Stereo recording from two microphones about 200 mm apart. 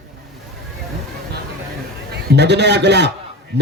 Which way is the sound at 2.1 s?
55° right (ahead or behind).